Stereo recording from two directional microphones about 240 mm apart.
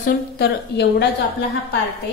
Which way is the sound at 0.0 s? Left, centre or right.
Left.